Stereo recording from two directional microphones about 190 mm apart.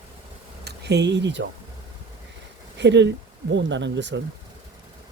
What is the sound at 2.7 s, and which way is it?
Speech, 65° right (ahead or behind).